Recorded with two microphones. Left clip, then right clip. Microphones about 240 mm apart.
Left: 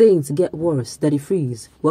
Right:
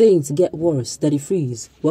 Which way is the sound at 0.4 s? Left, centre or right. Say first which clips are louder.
Right 2 dB; centre.